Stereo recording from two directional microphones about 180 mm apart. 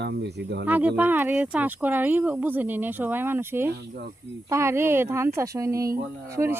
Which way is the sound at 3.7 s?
65° right (ahead or behind).